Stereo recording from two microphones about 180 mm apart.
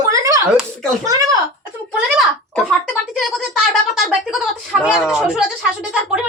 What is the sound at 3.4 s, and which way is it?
Speech, centre (ahead or behind).